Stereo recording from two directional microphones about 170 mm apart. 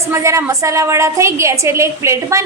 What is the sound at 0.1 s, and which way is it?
A woman's voice, 15° right (ahead or behind).